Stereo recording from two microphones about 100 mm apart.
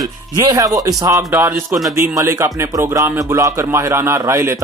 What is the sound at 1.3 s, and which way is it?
Speech, 20° right (ahead or behind).